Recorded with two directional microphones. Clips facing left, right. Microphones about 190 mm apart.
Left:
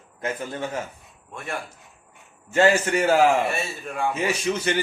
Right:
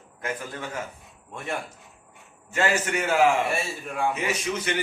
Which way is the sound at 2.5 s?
30° left (ahead or behind).